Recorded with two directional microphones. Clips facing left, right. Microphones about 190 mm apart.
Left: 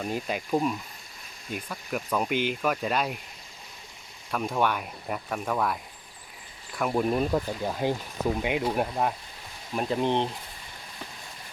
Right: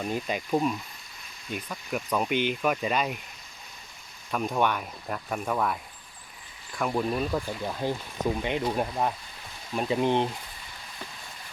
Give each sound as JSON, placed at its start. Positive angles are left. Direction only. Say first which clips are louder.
{"t": 0.0, "sound": "speech", "louder": "even", "side_deg": 0}
{"t": 4.3, "sound": "speech", "louder": "even", "side_deg": 0}
{"t": 7.1, "sound": "speech", "louder": "left 3 dB", "side_deg": 20}
{"t": 7.3, "sound": "speech", "louder": "left 3 dB", "side_deg": 10}